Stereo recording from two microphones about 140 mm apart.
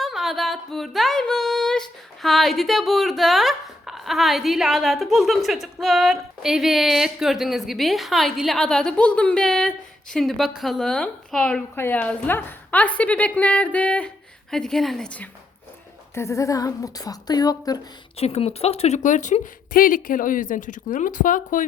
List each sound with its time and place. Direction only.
0.0 s a sound: centre (ahead or behind)
5.8 s a woman's voice: centre (ahead or behind)
16.1 s a woman's voice: 20° left (ahead or behind)
18.2 s speech: 45° left (ahead or behind); by 21.6 s 70° left (ahead or behind)